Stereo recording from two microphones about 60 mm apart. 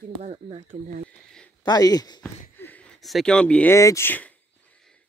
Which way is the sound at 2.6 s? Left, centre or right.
Left.